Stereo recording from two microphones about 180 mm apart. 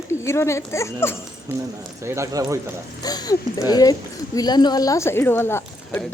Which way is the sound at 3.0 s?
20° left (ahead or behind).